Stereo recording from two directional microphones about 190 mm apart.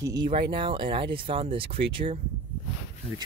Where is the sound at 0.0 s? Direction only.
20° right (ahead or behind).